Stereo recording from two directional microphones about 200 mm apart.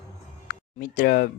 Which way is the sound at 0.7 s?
45° left (ahead or behind).